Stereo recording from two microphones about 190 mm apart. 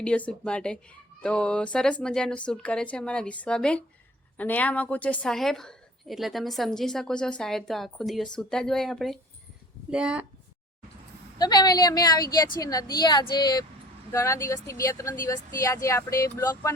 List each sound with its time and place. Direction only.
0.0 s a woman's voice: 5° left (ahead or behind)
11.3 s a woman's voice: 20° left (ahead or behind)